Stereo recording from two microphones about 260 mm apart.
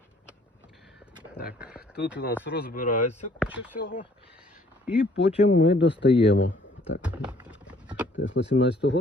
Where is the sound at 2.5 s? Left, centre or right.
Left.